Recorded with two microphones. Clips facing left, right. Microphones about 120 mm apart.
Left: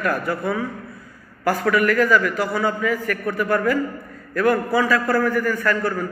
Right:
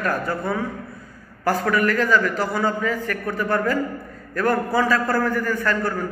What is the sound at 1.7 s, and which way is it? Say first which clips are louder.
A man's voice: left 3 dB; 30° right (ahead or behind).